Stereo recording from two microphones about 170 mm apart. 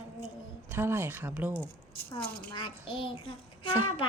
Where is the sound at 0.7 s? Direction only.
15° right (ahead or behind).